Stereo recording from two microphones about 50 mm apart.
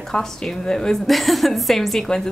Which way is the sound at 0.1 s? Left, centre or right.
Centre.